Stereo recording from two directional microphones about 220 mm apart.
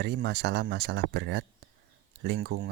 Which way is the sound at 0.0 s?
50° right (ahead or behind).